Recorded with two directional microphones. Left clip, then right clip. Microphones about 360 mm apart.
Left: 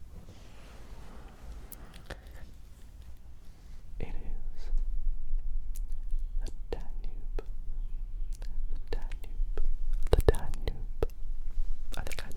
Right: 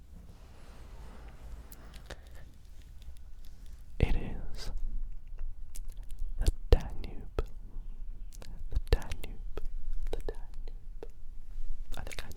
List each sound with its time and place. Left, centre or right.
1.0 s a sound: centre
3.9 s whispering: right
6.4 s whispering: right
9.6 s whispering: centre
10.0 s whispering: left
11.9 s a sound: centre